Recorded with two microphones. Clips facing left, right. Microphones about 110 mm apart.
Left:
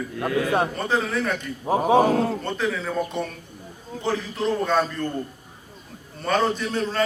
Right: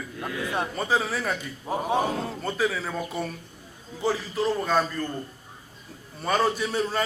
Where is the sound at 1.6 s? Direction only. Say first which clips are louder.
Left 7 dB; 50° left (ahead or behind).